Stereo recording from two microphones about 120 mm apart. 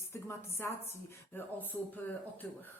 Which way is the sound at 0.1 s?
20° left (ahead or behind).